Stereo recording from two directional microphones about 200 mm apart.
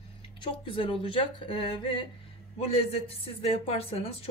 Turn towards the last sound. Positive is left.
turn(degrees=30)  # may be behind; listen again after turning